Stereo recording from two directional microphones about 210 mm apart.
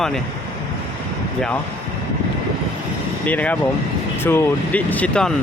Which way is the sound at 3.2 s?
5° left (ahead or behind).